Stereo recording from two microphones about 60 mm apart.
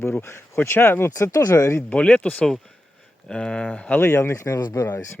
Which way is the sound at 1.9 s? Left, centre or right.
Centre.